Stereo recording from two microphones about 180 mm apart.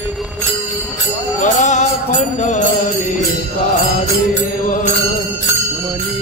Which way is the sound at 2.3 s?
40° left (ahead or behind).